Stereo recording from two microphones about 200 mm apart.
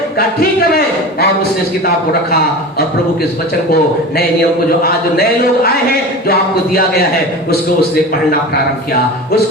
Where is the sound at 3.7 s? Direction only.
50° left (ahead or behind).